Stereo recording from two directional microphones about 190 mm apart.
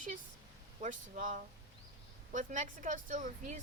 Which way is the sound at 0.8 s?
45° right (ahead or behind).